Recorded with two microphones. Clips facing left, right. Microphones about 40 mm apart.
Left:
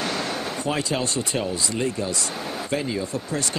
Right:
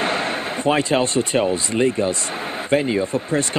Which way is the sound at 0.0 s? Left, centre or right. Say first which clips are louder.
Right 5 dB; right.